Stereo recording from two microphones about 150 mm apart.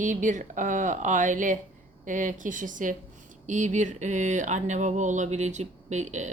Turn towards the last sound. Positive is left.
turn(degrees=-50)  # may be behind; listen again after turning